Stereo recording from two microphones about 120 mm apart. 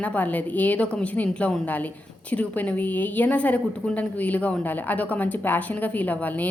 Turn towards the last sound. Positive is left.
turn(degrees=15)  # may be behind; listen again after turning